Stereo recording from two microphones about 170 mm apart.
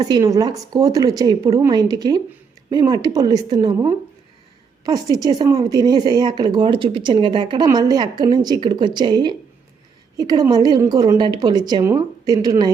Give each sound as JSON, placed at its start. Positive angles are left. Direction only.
{"t": 0.0, "sound": "a woman's voice", "side_deg": -20}